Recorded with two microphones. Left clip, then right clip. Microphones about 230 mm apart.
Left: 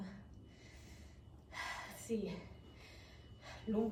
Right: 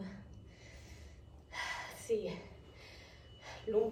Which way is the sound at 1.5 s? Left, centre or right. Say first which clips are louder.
Right 4 dB; left.